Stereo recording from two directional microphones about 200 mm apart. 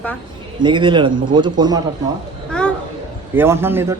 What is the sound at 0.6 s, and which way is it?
A man's voice, 25° right (ahead or behind).